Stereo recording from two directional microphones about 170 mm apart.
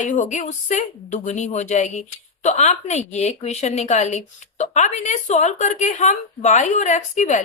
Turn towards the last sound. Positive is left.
turn(degrees=45)  # may be behind; listen again after turning